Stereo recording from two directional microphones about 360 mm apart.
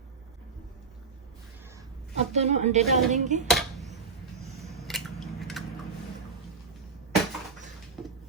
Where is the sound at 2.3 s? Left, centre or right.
Centre.